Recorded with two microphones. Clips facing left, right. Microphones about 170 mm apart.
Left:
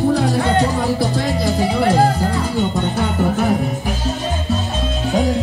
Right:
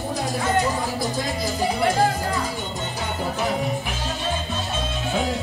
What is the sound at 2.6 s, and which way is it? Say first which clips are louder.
Music: left 11 dB; 60° left (ahead or behind).